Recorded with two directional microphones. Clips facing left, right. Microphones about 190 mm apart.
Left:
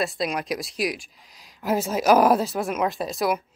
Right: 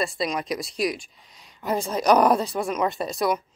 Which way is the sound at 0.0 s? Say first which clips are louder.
Even; centre (ahead or behind).